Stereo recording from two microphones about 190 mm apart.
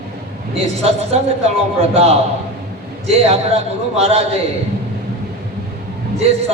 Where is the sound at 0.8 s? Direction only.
35° right (ahead or behind).